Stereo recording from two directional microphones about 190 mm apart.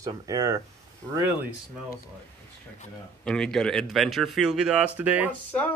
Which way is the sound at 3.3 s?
5° left (ahead or behind).